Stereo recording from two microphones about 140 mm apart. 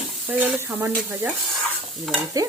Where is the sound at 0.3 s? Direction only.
10° right (ahead or behind).